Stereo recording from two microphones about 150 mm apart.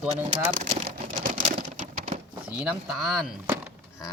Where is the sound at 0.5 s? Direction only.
55° right (ahead or behind).